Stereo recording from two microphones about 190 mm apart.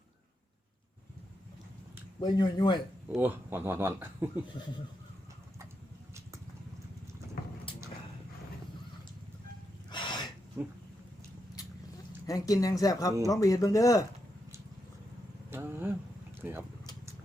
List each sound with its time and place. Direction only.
2.2 s speech: 20° left (ahead or behind)
3.1 s speech: 10° right (ahead or behind)
9.9 s gasp: 25° left (ahead or behind)
10.6 s speech: 15° right (ahead or behind)
12.2 s speech: 20° left (ahead or behind)
15.4 s vehicle: 10° right (ahead or behind)
16.4 s speech: 10° right (ahead or behind)